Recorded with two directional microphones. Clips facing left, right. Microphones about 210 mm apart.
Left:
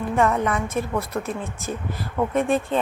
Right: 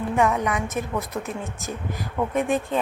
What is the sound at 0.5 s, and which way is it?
Speech, 15° right (ahead or behind).